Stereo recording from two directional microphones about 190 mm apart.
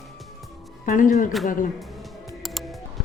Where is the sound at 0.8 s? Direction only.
45° left (ahead or behind).